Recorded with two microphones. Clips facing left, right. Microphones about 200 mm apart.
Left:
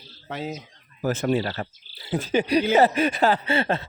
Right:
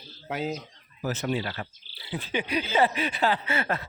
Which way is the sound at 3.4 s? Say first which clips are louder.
Left 5 dB; 30° left (ahead or behind).